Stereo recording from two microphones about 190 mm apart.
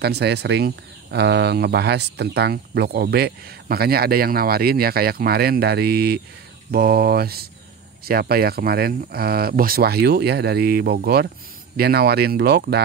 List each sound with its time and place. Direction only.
0.0 s speech: 60° right (ahead or behind)